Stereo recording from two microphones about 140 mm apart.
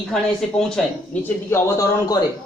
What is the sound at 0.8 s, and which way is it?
Speech, centre (ahead or behind).